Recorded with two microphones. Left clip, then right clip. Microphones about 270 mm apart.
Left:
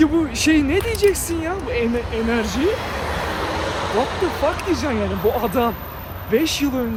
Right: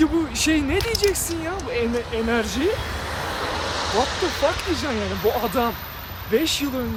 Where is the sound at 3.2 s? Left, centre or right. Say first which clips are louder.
Even; left.